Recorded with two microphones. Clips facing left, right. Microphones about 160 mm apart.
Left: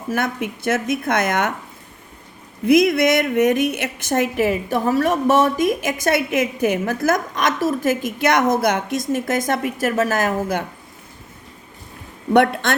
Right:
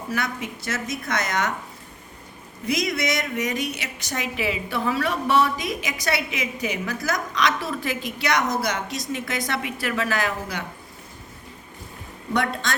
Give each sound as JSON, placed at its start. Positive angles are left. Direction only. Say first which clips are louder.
{"t": 0.1, "sound": "speech", "louder": "left 7 dB", "side_deg": 55}
{"t": 2.6, "sound": "a woman's voice", "louder": "left 11 dB", "side_deg": 55}
{"t": 12.3, "sound": "speech", "louder": "left 9 dB", "side_deg": 60}